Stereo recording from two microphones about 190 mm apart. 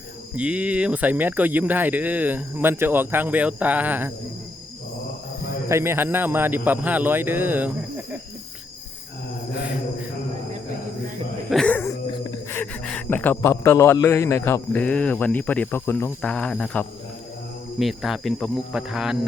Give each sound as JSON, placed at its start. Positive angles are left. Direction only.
{"t": 0.3, "sound": "speech", "side_deg": -5}
{"t": 5.6, "sound": "speech", "side_deg": -15}
{"t": 11.5, "sound": "speech", "side_deg": 5}